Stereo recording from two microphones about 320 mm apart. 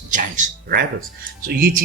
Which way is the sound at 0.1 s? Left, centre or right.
Right.